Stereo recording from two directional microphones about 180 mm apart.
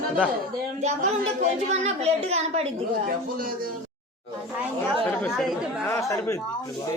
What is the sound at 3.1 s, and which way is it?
Speech, 50° right (ahead or behind).